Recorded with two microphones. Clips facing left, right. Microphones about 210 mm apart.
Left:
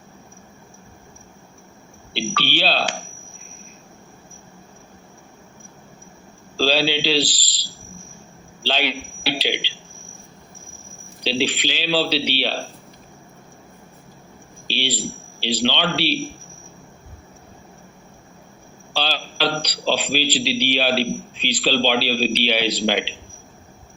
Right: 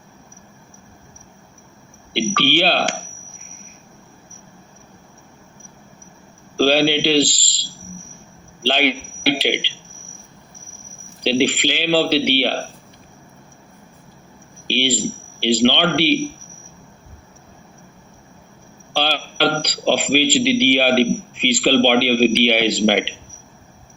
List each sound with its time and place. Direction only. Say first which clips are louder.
2.1 s a man's voice: right 6 dB; 50° right (ahead or behind)
6.6 s a man's voice: right 5 dB; 50° right (ahead or behind)
8.6 s a man's voice: right 5 dB; 50° right (ahead or behind)
11.2 s a man's voice: right 5 dB; 55° right (ahead or behind)
14.7 s a man's voice: right 6 dB; 50° right (ahead or behind)
18.9 s a man's voice: right 4 dB; 50° right (ahead or behind)